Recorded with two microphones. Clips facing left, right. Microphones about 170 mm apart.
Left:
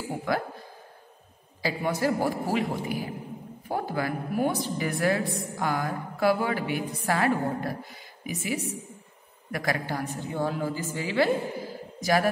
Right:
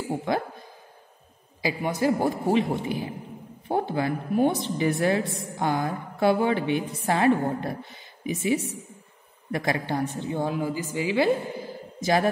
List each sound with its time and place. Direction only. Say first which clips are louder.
0.3 s a woman's voice: right 1 dB; 25° right (ahead or behind)
1.6 s a woman's voice: right 2 dB; 20° right (ahead or behind)